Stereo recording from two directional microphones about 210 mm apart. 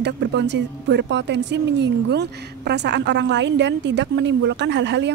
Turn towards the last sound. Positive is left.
turn(degrees=-55)  # may be behind; listen again after turning